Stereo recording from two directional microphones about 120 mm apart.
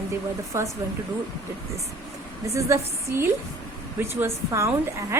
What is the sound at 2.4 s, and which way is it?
A woman's voice, 25° right (ahead or behind).